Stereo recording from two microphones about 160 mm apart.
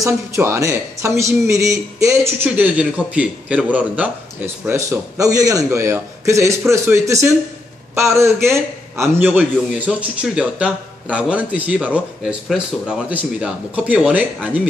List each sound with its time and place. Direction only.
0.0 s a man's voice: 15° right (ahead or behind)